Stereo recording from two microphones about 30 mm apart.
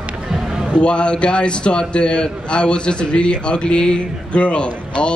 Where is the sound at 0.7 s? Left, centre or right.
Left.